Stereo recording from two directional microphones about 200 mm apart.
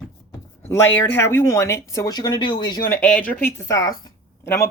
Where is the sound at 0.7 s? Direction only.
10° left (ahead or behind).